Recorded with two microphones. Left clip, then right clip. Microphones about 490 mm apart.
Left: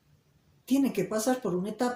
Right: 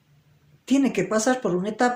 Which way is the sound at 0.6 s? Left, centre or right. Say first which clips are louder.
Right 6 dB; right.